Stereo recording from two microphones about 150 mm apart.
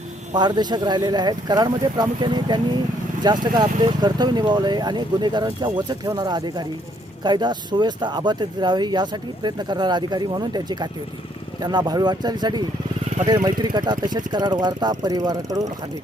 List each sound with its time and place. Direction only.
0.3 s speech: 30° right (ahead or behind)